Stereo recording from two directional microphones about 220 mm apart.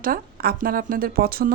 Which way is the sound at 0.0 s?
40° right (ahead or behind).